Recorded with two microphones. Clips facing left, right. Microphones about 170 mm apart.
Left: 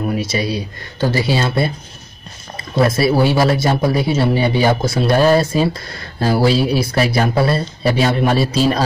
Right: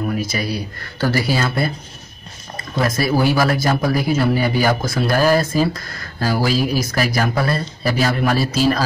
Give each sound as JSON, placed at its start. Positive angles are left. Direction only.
{"t": 0.1, "sound": "speech", "side_deg": 25}
{"t": 3.0, "sound": "speech", "side_deg": 30}